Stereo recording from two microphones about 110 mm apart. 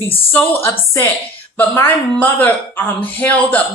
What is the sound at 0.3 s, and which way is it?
A man's voice, 20° left (ahead or behind).